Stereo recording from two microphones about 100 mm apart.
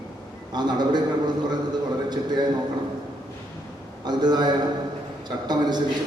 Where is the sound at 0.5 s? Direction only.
45° right (ahead or behind).